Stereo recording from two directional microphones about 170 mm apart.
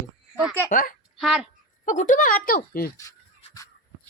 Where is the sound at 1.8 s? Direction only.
50° left (ahead or behind).